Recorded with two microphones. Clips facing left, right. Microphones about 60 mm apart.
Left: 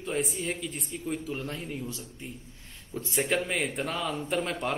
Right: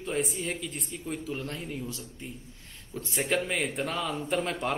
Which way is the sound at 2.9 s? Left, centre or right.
Centre.